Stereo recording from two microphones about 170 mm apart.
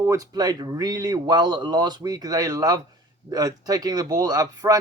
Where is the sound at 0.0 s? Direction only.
20° right (ahead or behind).